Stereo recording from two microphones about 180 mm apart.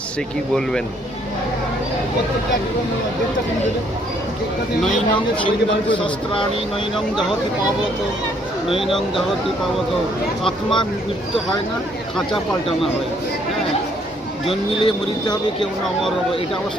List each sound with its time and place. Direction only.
5.9 s speech: 25° left (ahead or behind)
8.8 s speech: centre (ahead or behind)
14.7 s speech: 30° left (ahead or behind)